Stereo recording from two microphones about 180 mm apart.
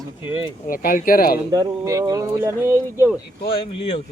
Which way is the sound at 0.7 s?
50° left (ahead or behind).